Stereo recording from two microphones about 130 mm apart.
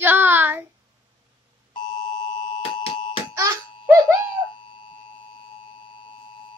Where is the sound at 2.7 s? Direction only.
40° left (ahead or behind).